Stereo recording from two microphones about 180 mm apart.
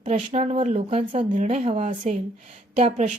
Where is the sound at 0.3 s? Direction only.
35° right (ahead or behind).